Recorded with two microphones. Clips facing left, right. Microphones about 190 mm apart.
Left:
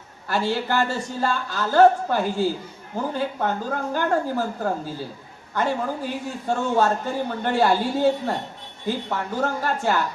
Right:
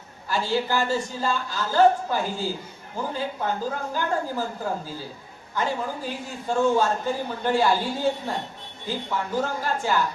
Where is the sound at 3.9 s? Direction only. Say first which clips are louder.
Left 7 dB; 60° left (ahead or behind).